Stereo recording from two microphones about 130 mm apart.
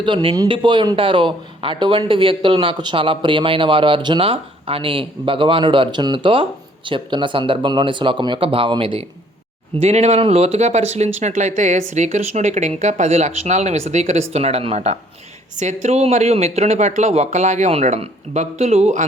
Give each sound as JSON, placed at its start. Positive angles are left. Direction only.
{"t": 0.0, "sound": "speech", "side_deg": -40}
{"t": 9.7, "sound": "speech", "side_deg": -55}
{"t": 15.5, "sound": "speech", "side_deg": -65}